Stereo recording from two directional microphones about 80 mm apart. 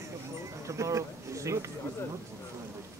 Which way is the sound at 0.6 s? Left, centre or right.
Right.